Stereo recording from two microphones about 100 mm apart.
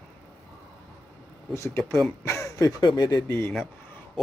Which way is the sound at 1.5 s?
30° left (ahead or behind).